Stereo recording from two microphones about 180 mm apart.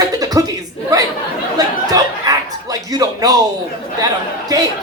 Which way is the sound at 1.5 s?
20° right (ahead or behind).